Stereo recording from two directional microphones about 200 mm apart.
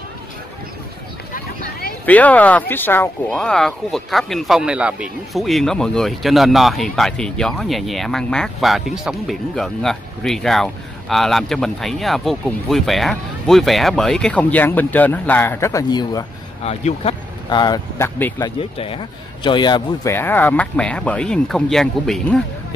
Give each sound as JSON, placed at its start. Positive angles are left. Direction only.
{"t": 1.3, "sound": "a sound", "side_deg": 50}
{"t": 2.0, "sound": "speech", "side_deg": 5}
{"t": 16.6, "sound": "speech", "side_deg": 30}
{"t": 18.6, "sound": "speech", "side_deg": 25}